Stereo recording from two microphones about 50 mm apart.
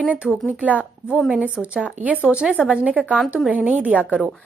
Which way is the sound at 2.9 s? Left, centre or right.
Right.